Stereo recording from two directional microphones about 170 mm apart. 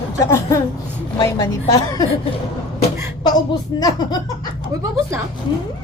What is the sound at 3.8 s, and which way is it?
Speech, 25° left (ahead or behind).